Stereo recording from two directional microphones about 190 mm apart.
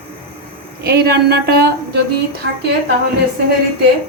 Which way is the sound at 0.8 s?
55° right (ahead or behind).